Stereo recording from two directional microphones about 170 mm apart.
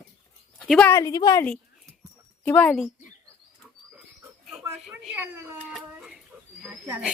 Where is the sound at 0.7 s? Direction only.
5° left (ahead or behind).